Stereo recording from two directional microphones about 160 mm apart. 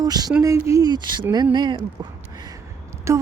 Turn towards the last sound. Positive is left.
turn(degrees=-20)  # may be behind; listen again after turning